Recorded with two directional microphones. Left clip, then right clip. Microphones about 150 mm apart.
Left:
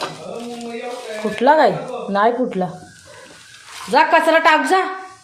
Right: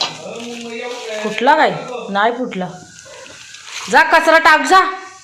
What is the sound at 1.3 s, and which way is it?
Speech, 30° left (ahead or behind).